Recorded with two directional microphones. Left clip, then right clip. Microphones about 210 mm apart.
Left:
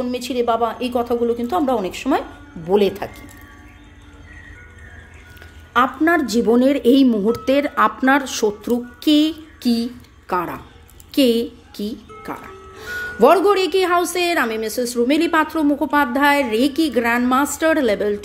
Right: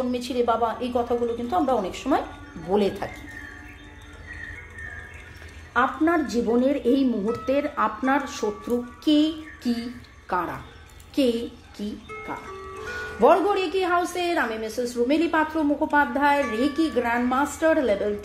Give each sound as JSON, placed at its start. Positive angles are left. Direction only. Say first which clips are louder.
{"t": 0.0, "sound": "a woman's voice", "louder": "left 4 dB", "side_deg": 30}
{"t": 5.7, "sound": "a woman's voice", "louder": "left 6 dB", "side_deg": 40}